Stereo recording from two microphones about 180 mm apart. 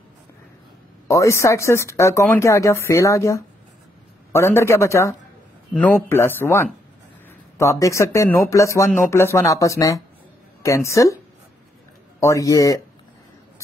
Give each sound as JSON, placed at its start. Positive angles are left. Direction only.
{"t": 1.0, "sound": "speech", "side_deg": 15}
{"t": 7.8, "sound": "speech", "side_deg": 15}
{"t": 12.2, "sound": "speech", "side_deg": 15}